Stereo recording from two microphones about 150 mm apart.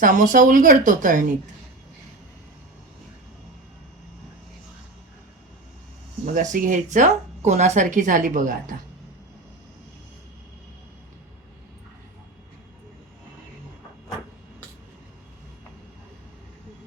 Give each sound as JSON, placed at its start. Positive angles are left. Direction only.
{"t": 0.0, "sound": "speech", "side_deg": -60}
{"t": 6.3, "sound": "speech", "side_deg": -60}